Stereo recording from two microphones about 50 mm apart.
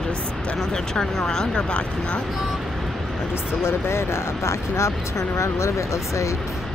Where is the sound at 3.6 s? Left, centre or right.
Left.